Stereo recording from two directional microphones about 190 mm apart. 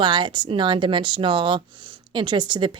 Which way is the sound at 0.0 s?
25° right (ahead or behind).